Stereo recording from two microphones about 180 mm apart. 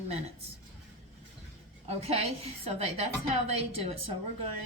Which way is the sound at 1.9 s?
35° right (ahead or behind).